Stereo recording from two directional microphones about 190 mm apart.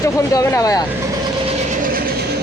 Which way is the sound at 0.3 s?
15° left (ahead or behind).